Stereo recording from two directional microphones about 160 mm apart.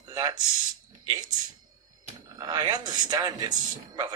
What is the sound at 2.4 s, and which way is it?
Speech, 25° right (ahead or behind).